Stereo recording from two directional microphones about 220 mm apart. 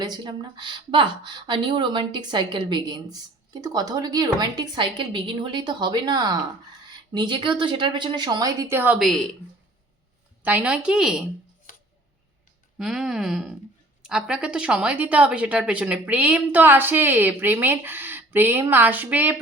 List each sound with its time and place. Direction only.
0.0 s a woman's voice: 20° right (ahead or behind); by 9.2 s centre (ahead or behind)
10.4 s a woman's voice: 5° right (ahead or behind)
12.8 s speech: centre (ahead or behind)